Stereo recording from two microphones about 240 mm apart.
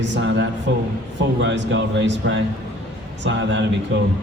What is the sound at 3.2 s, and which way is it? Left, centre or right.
Speech, right.